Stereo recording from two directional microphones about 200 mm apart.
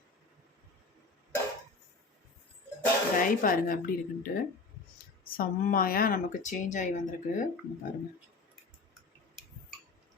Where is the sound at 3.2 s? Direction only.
45° left (ahead or behind).